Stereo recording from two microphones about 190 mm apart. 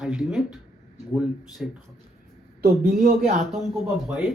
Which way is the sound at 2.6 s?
55° right (ahead or behind).